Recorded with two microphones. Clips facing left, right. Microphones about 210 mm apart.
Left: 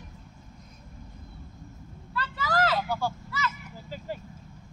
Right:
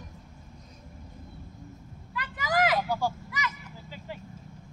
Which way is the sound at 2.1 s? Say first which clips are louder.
Even; 15° right (ahead or behind).